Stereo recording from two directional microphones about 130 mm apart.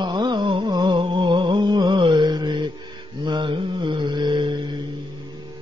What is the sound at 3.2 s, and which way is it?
Mantra, 40° right (ahead or behind).